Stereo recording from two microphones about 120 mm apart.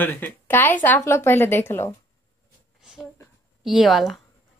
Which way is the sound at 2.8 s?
5° right (ahead or behind).